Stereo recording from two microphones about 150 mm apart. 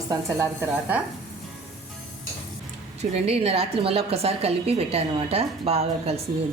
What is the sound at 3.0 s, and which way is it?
A woman's voice, 45° right (ahead or behind).